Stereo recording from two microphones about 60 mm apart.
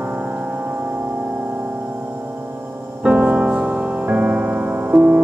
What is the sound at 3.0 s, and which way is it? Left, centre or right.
Music, right.